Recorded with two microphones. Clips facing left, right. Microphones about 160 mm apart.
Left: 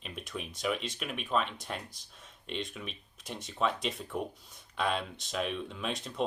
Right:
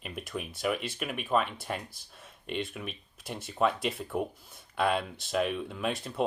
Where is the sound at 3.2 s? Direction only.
10° right (ahead or behind).